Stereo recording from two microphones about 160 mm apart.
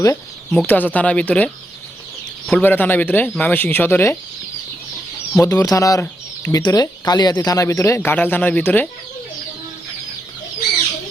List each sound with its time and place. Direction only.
0.5 s speech: 10° left (ahead or behind)
2.5 s speech: 10° left (ahead or behind)
5.4 s speech: 20° left (ahead or behind)